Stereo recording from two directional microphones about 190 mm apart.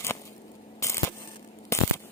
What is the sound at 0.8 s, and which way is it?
Camera, 15° left (ahead or behind).